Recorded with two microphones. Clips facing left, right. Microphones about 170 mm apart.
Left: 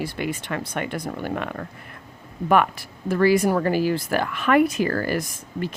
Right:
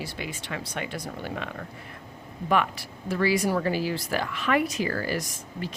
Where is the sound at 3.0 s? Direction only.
50° left (ahead or behind).